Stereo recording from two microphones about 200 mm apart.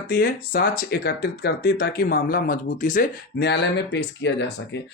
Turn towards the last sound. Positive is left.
turn(degrees=60)  # may be behind; listen again after turning